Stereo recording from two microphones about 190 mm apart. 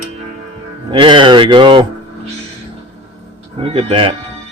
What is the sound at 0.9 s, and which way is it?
Speech, 25° right (ahead or behind).